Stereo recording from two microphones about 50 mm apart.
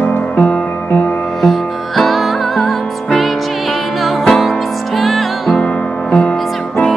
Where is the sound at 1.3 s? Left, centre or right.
Centre.